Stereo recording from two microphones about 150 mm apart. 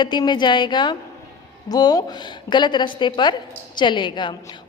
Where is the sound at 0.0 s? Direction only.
30° left (ahead or behind).